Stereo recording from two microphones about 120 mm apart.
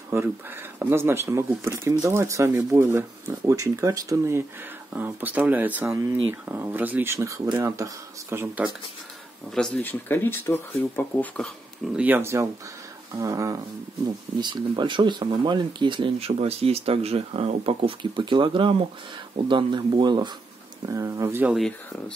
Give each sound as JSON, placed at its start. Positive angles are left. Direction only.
{"t": 0.1, "sound": "speech", "side_deg": -20}
{"t": 9.5, "sound": "speech", "side_deg": 10}
{"t": 11.9, "sound": "speech", "side_deg": -15}
{"t": 14.4, "sound": "speech", "side_deg": -40}
{"t": 16.3, "sound": "speech", "side_deg": -60}
{"t": 20.8, "sound": "speech", "side_deg": -25}